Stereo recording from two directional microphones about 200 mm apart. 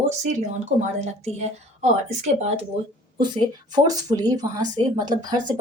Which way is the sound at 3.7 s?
20° right (ahead or behind).